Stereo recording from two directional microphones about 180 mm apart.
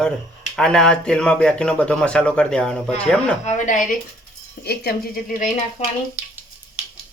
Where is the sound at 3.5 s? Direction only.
45° left (ahead or behind).